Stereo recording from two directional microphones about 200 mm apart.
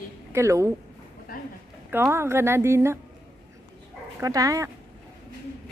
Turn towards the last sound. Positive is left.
turn(degrees=-15)  # may be behind; listen again after turning